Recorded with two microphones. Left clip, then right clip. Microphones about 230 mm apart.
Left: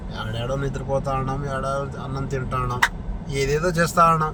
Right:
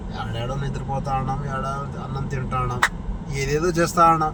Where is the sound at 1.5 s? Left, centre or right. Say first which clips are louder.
Left 2 dB; left.